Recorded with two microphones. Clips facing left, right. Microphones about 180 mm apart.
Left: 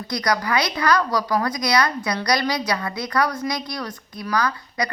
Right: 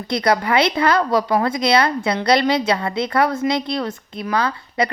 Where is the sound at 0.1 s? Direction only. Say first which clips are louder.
Right 5 dB; 25° right (ahead or behind).